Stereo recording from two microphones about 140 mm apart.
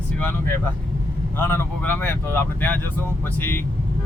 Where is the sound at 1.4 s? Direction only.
15° left (ahead or behind).